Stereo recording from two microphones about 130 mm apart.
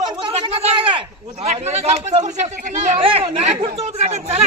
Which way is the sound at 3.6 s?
55° right (ahead or behind).